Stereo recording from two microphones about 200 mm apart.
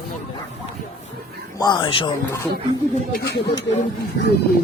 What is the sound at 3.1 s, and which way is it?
Speech, 55° left (ahead or behind).